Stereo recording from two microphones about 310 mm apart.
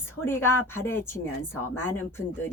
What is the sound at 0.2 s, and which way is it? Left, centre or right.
Speech, centre.